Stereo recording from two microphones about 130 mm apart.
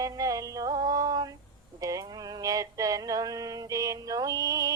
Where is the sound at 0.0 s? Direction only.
25° right (ahead or behind).